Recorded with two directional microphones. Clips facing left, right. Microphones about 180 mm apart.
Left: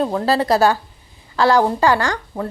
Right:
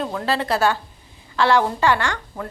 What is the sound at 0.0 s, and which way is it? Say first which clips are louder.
A woman's voice: left 5 dB; 35° left (ahead or behind).